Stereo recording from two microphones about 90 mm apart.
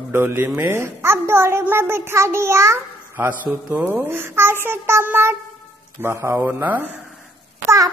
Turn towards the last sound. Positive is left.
turn(degrees=-35)  # may be behind; listen again after turning